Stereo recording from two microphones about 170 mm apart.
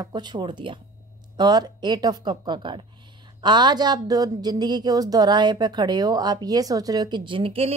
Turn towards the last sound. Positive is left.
turn(degrees=-35)  # may be behind; listen again after turning